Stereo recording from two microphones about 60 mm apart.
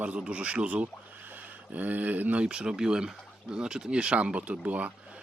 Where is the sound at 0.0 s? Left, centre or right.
Right.